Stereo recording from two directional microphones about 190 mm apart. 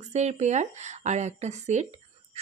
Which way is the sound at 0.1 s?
35° right (ahead or behind).